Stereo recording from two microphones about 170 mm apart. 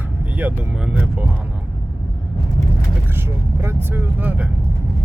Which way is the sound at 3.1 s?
15° right (ahead or behind).